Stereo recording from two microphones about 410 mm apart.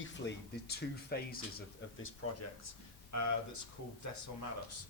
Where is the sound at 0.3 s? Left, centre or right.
Left.